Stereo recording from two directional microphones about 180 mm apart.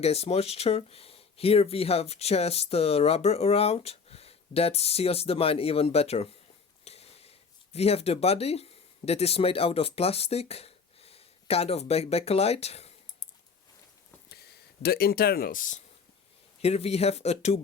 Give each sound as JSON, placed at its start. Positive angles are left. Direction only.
{"t": 0.0, "sound": "speech", "side_deg": 35}
{"t": 14.8, "sound": "speech", "side_deg": 60}
{"t": 16.6, "sound": "speech", "side_deg": 35}